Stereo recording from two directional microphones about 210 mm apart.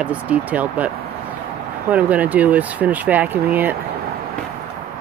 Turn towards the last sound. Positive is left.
turn(degrees=-10)  # may be behind; listen again after turning